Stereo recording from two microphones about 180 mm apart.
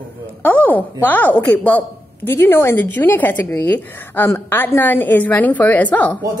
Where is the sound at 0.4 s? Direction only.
10° left (ahead or behind).